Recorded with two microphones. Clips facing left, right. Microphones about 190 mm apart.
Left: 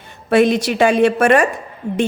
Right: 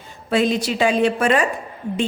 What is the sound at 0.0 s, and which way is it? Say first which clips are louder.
A woman's voice: left 6 dB; 65° left (ahead or behind).